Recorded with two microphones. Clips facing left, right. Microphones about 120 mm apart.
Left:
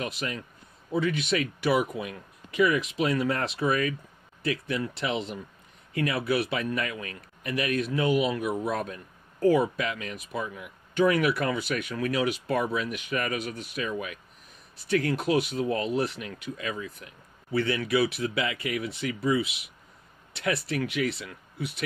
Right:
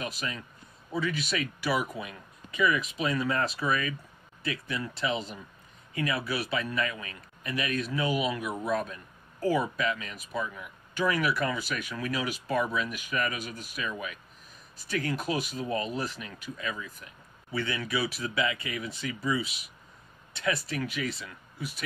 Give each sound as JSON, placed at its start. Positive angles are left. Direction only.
{"t": 0.0, "sound": "speech", "side_deg": 60}